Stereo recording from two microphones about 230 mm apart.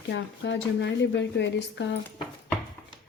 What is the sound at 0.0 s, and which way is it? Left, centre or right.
A woman's voice, left.